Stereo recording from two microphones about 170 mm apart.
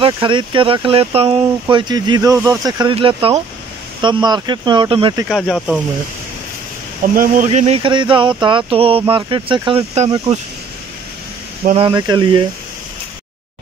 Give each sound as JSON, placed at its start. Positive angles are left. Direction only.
{"t": 0.0, "sound": "speech", "side_deg": -30}
{"t": 5.3, "sound": "speech", "side_deg": 0}
{"t": 7.0, "sound": "speech", "side_deg": -55}
{"t": 7.4, "sound": "speech", "side_deg": -40}
{"t": 11.7, "sound": "speech", "side_deg": -25}